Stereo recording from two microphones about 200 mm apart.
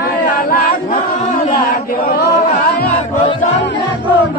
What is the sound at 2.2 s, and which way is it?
Chant, 45° left (ahead or behind).